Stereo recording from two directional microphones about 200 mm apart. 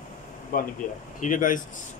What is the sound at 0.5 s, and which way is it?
Speech, 45° left (ahead or behind).